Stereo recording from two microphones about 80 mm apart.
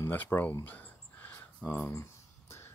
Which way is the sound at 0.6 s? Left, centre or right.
Left.